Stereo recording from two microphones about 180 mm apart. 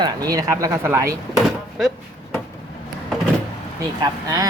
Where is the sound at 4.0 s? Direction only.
20° right (ahead or behind).